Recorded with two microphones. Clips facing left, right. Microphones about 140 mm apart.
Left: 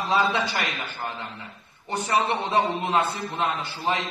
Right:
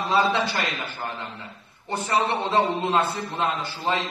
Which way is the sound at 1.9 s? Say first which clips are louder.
Even; 15° left (ahead or behind).